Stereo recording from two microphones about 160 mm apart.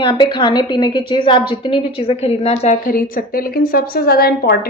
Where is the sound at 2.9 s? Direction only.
60° left (ahead or behind).